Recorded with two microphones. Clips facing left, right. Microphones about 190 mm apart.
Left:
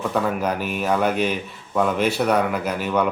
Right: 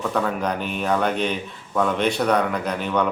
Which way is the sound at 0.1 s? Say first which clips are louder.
Left 2 dB; 5° left (ahead or behind).